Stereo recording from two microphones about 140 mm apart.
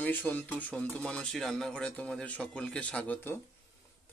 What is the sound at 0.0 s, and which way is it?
Speech, 10° left (ahead or behind).